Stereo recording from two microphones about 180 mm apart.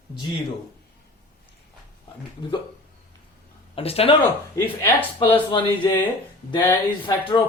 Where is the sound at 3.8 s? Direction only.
35° left (ahead or behind).